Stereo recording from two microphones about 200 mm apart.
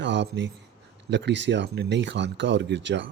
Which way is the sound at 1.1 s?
60° right (ahead or behind).